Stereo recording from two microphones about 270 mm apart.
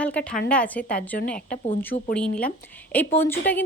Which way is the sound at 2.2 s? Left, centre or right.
Centre.